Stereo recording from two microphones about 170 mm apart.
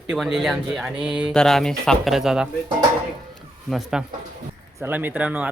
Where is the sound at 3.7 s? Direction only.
Centre (ahead or behind).